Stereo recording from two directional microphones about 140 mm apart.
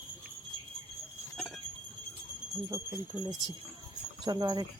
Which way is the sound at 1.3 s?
5° left (ahead or behind).